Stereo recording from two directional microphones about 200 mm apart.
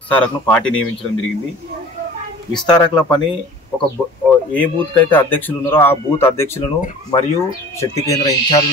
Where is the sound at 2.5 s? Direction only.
5° left (ahead or behind).